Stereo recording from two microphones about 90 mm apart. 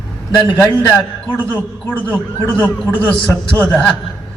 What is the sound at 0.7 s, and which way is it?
A man's voice, 15° left (ahead or behind).